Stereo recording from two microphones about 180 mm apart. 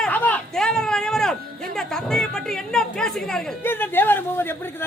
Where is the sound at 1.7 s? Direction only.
5° left (ahead or behind).